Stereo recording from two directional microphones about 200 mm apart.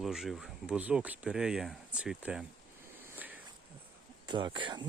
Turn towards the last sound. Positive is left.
turn(degrees=-25)  # may be behind; listen again after turning